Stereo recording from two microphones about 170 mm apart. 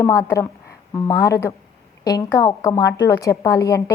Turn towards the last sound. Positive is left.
turn(degrees=20)  # may be behind; listen again after turning